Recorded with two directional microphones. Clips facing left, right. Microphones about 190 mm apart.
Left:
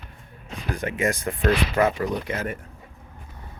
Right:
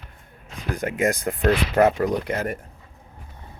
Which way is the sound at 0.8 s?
45° right (ahead or behind).